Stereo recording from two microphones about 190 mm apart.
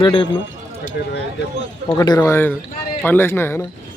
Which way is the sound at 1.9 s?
20° left (ahead or behind).